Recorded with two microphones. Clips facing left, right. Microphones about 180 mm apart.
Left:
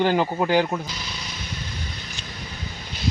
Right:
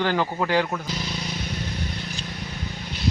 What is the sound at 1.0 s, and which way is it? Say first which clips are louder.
Vehicle: right 5 dB; 50° right (ahead or behind).